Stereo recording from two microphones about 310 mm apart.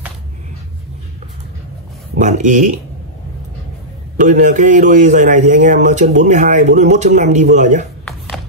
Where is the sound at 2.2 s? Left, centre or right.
Right.